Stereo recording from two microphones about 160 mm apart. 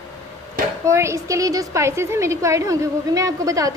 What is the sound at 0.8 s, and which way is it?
A woman's voice, 20° right (ahead or behind).